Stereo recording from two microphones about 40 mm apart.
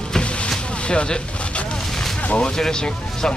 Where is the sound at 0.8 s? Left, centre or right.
Left.